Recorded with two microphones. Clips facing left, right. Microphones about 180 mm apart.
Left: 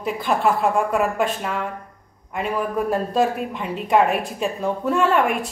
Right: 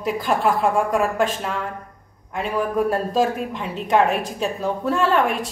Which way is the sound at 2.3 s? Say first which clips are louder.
Right 1 dB; centre (ahead or behind).